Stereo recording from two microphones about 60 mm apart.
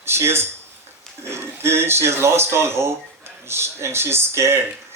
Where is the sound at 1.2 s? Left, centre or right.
Right.